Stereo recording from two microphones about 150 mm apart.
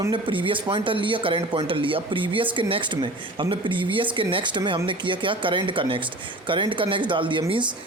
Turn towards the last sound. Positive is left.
turn(degrees=-35)  # may be behind; listen again after turning